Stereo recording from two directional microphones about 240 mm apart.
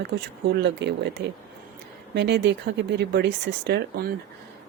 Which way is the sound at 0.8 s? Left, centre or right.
Right.